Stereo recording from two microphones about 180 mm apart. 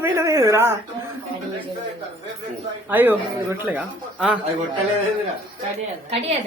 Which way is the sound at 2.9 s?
10° right (ahead or behind).